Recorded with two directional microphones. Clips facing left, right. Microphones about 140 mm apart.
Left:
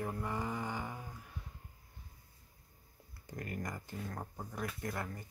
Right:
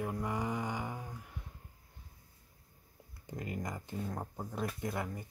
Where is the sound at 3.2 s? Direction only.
20° right (ahead or behind).